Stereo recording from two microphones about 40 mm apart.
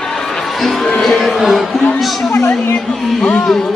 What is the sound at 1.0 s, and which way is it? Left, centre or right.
Speech, centre.